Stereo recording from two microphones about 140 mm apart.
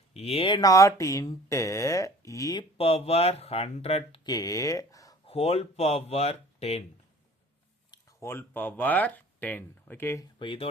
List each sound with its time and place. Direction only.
0.1 s speech: 45° left (ahead or behind); by 2.6 s 25° left (ahead or behind)
2.7 s speech: 45° left (ahead or behind)
4.3 s speech: 25° left (ahead or behind)
5.2 s speech: 45° left (ahead or behind)
8.2 s speech: 15° left (ahead or behind)
10.3 s speech: 40° left (ahead or behind)